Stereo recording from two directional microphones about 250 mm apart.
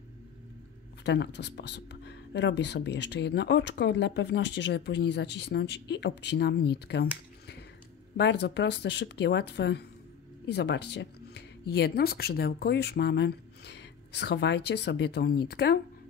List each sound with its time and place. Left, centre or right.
1.0 s speech: left
8.2 s speech: left